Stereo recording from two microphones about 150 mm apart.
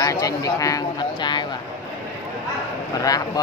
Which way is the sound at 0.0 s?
25° left (ahead or behind).